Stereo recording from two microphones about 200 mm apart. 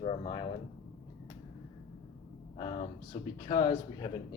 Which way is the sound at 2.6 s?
25° left (ahead or behind).